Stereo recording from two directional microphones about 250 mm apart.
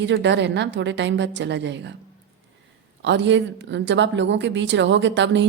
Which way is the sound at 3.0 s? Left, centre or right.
Right.